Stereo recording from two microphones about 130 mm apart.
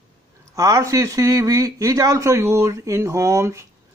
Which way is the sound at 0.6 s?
25° right (ahead or behind).